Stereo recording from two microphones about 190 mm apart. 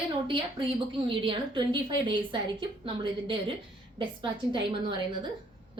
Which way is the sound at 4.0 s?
25° right (ahead or behind).